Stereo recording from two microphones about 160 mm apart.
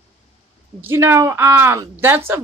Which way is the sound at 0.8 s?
15° right (ahead or behind).